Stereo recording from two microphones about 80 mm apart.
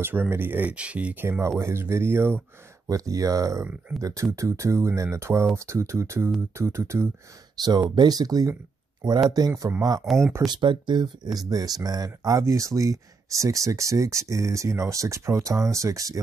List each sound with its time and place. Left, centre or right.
0.0 s speech: right
1.6 s speech: right
2.9 s speech: right
7.5 s speech: right
10.0 s speech: centre
10.4 s speech: right
11.3 s speech: right